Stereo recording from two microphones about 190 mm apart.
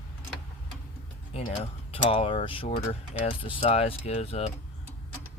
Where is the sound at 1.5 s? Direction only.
30° left (ahead or behind).